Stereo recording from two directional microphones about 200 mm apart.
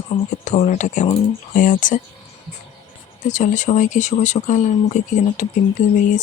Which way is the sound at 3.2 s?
40° left (ahead or behind).